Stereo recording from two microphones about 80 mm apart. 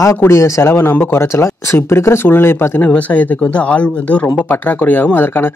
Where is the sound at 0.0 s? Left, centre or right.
Left.